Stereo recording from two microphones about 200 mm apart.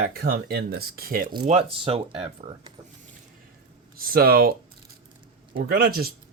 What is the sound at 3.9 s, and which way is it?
Speech, 45° right (ahead or behind).